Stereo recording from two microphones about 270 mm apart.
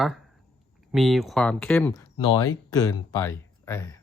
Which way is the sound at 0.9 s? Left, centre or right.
Centre.